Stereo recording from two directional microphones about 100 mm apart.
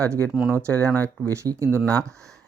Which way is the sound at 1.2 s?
30° right (ahead or behind).